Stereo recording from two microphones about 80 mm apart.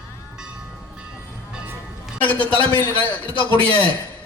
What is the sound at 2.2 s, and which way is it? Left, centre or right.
Speech, left.